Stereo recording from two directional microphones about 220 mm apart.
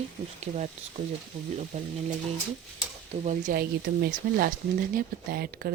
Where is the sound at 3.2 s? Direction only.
40° right (ahead or behind).